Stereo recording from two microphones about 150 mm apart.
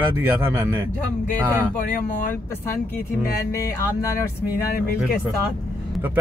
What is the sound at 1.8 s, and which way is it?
Speech, 65° left (ahead or behind).